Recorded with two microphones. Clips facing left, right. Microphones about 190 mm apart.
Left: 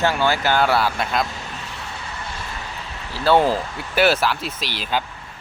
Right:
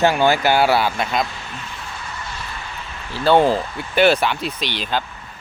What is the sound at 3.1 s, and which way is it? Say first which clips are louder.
Speech: right 2 dB; 5° left (ahead or behind).